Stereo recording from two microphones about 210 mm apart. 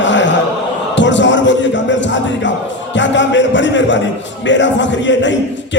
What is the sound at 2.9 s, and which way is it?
A man's voice, 60° left (ahead or behind).